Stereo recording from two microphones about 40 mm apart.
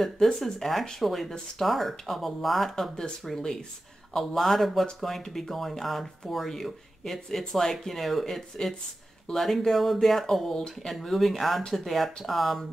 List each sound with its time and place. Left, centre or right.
0.0 s speech: centre
10.9 s speech: centre